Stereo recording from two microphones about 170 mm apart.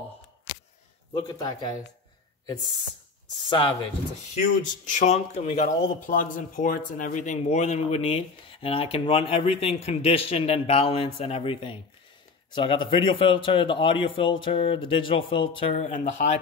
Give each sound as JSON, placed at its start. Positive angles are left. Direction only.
{"t": 1.1, "sound": "speech", "side_deg": 30}
{"t": 3.4, "sound": "speech", "side_deg": 30}
{"t": 4.4, "sound": "speech", "side_deg": 45}